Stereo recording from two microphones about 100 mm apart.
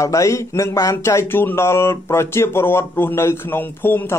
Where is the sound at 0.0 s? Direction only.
30° left (ahead or behind).